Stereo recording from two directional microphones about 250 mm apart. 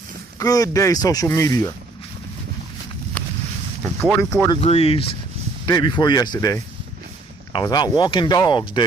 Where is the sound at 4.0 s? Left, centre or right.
Centre.